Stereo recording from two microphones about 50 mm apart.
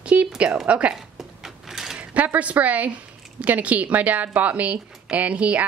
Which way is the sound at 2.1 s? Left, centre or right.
Right.